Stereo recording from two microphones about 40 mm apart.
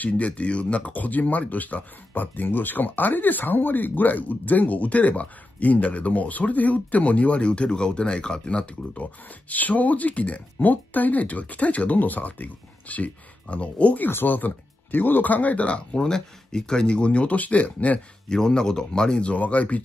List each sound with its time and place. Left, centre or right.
0.0 s speech: left
9.5 s speech: left
14.2 s speech: left
16.0 s speech: centre; by 18.0 s left
18.3 s speech: centre
19.2 s speech: left